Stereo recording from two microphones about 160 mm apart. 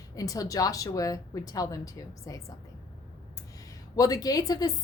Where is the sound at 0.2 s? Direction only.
20° left (ahead or behind).